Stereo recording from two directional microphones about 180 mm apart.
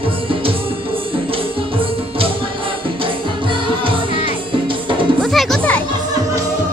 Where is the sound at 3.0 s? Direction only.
30° right (ahead or behind).